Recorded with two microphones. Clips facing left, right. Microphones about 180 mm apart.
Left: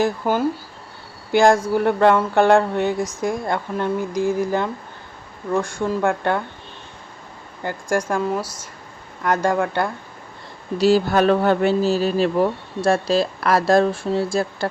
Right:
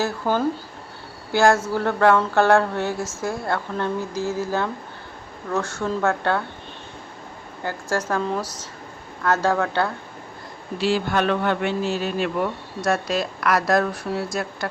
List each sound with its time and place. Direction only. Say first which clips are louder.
0.0 s speech: left 3 dB; 10° left (ahead or behind)
7.6 s speech: left 3 dB; 15° left (ahead or behind)
10.8 s speech: left 6 dB; 40° left (ahead or behind)